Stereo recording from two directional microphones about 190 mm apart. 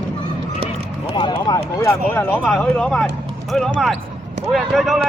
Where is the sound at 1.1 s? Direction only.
20° left (ahead or behind).